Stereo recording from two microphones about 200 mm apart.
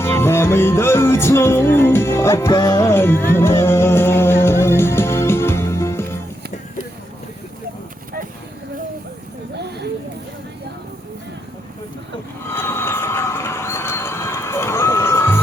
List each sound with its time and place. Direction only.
0.0 s music: 10° left (ahead or behind)
9.6 s a sound: 55° right (ahead or behind)
12.5 s train: 10° left (ahead or behind)